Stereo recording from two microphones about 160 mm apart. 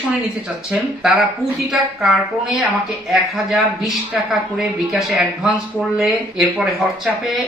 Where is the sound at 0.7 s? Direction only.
Centre (ahead or behind).